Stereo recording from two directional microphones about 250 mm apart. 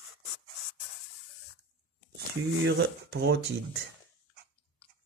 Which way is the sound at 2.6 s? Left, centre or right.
Right.